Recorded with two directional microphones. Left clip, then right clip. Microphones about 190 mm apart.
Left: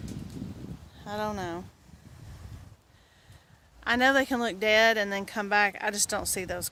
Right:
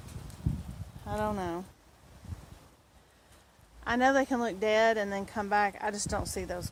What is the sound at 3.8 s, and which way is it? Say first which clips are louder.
Speech: left 3 dB; 20° left (ahead or behind).